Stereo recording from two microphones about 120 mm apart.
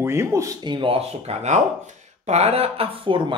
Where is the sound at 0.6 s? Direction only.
45° right (ahead or behind).